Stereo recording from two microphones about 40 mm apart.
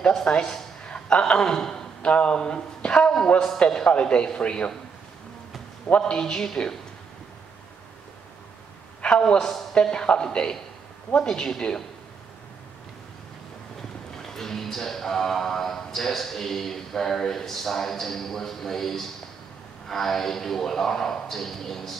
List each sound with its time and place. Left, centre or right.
0.1 s a woman's voice: centre
1.5 s a man's voice: centre
2.0 s speech: left
5.9 s speech: left
6.4 s speech: centre
9.0 s speech: left
9.8 s speech: left
14.1 s speech: centre